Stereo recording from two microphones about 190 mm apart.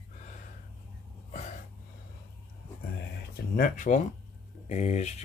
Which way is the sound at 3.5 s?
45° left (ahead or behind).